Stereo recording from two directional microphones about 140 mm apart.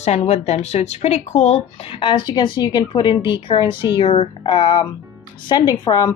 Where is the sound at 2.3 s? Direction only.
30° left (ahead or behind).